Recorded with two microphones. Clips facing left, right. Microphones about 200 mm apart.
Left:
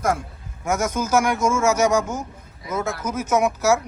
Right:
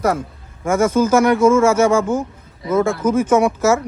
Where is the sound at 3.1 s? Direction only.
10° left (ahead or behind).